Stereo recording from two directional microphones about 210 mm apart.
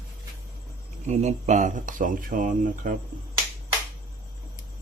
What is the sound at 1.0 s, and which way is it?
Speech, 35° right (ahead or behind).